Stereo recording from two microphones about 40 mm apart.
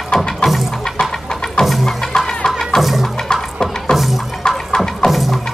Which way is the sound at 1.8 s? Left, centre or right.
Centre.